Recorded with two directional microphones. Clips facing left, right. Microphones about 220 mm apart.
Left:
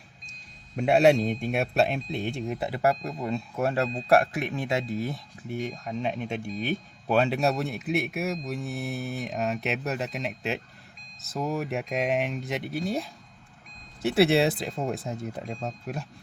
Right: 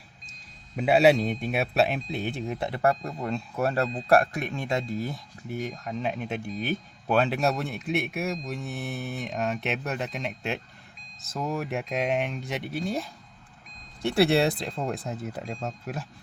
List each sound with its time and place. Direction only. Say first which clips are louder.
0.8 s speech: even; 5° right (ahead or behind)
2.9 s speech: even; 20° left (ahead or behind)
3.2 s speech: even; centre (ahead or behind)